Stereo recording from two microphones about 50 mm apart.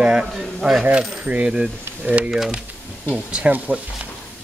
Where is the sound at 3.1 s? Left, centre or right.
Right.